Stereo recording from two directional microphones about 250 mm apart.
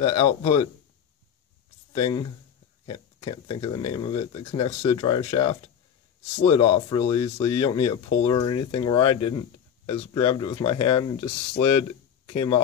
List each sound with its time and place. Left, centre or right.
0.0 s speech: left
1.9 s speech: centre